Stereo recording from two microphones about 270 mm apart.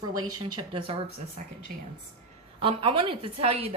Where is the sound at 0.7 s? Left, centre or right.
Centre.